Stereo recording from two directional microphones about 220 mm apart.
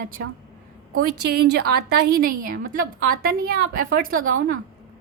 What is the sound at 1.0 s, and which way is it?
A woman's voice, 45° right (ahead or behind).